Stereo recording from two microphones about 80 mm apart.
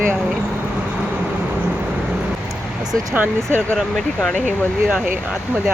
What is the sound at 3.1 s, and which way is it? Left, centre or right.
Speech, right.